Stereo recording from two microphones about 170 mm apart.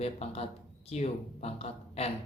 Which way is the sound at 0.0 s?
35° left (ahead or behind).